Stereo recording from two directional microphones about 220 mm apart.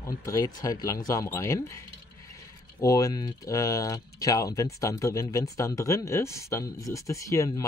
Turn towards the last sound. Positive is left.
turn(degrees=15)  # may be behind; listen again after turning